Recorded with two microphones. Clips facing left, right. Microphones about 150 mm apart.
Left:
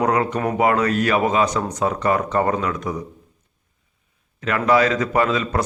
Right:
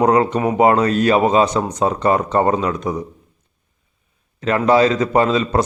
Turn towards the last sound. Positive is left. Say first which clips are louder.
# right 4 dB
turn(degrees=-25)  # may be behind; listen again after turning